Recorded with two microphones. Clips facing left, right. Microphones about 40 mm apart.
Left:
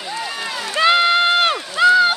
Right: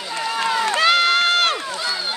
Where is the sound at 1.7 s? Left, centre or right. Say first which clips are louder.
Left 13 dB; left.